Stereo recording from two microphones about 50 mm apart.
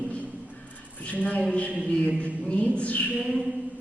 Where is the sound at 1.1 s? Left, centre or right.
Left.